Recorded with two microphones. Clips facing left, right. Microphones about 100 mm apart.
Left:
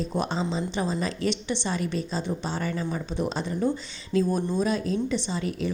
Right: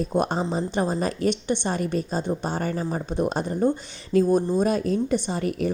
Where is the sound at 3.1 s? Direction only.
50° right (ahead or behind).